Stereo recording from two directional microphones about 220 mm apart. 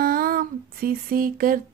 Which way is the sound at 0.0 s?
40° right (ahead or behind).